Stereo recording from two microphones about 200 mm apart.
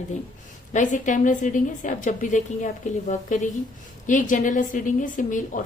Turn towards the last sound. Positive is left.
turn(degrees=40)  # may be behind; listen again after turning